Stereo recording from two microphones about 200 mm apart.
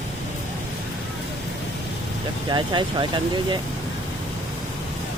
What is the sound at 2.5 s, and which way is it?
Speech, 25° right (ahead or behind).